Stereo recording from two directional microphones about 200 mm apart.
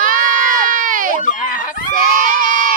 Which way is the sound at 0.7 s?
40° right (ahead or behind).